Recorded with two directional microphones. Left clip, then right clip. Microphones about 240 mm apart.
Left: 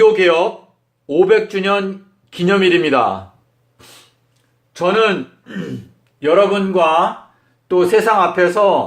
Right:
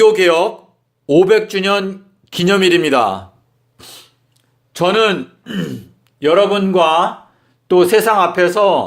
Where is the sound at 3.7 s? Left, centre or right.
Right.